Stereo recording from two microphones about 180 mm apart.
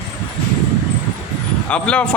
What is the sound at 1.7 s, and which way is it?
Speech, 5° left (ahead or behind).